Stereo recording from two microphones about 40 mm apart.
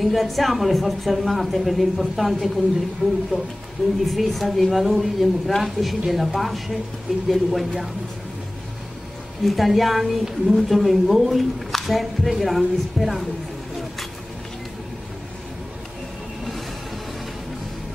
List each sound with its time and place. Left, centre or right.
0.0 s a woman's voice: centre
3.0 s speech: centre
3.8 s a woman's voice: centre
9.4 s a woman's voice: centre